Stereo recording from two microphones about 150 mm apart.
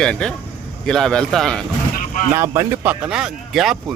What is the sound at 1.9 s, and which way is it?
Vehicle, 60° left (ahead or behind).